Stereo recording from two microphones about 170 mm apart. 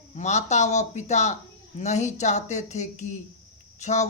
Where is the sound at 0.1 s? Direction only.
45° left (ahead or behind).